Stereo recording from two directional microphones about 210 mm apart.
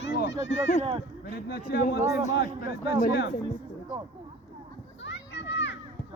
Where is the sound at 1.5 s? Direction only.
50° left (ahead or behind).